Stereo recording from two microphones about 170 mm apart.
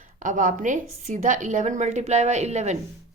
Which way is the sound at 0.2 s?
50° right (ahead or behind).